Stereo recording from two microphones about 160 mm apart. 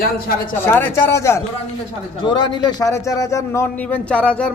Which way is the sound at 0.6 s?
15° left (ahead or behind).